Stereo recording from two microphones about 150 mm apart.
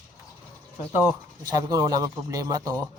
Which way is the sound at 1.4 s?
25° right (ahead or behind).